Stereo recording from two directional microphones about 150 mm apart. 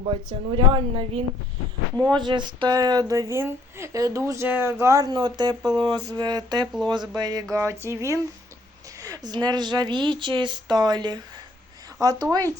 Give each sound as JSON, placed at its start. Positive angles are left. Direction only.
{"t": 0.0, "sound": "speech", "side_deg": -35}